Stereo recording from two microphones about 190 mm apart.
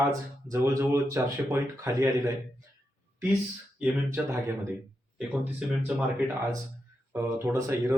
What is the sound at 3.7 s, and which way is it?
Speech, 10° right (ahead or behind).